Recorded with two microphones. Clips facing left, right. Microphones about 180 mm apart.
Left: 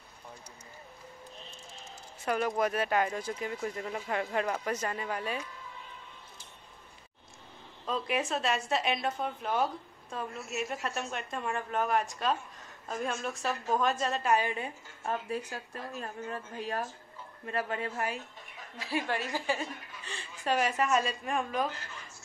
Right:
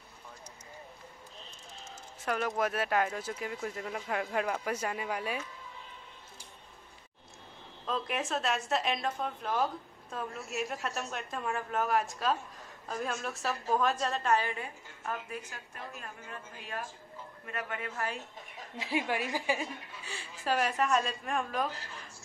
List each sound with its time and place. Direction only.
2.2 s a woman's voice: centre (ahead or behind)
7.8 s a woman's voice: centre (ahead or behind)
14.3 s a woman's voice: 20° left (ahead or behind)
18.8 s a woman's voice: 15° right (ahead or behind); by 21.6 s centre (ahead or behind)